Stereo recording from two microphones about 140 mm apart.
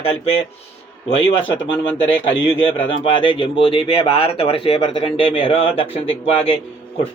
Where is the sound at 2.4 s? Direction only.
40° left (ahead or behind).